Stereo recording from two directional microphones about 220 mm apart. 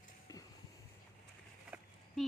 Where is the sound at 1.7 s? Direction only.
10° right (ahead or behind).